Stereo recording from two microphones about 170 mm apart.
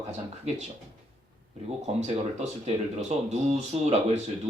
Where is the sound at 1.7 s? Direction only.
40° right (ahead or behind).